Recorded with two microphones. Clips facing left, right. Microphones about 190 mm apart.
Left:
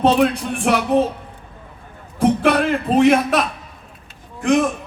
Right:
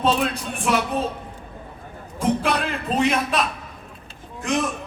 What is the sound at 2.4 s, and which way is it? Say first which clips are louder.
A man's voice: left 7 dB; 65° left (ahead or behind).